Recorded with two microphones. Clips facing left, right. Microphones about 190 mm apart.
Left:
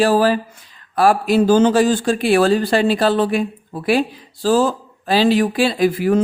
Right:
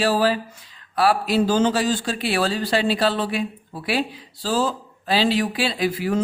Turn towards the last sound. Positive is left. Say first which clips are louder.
# left 7 dB
turn(degrees=50)  # may be behind; listen again after turning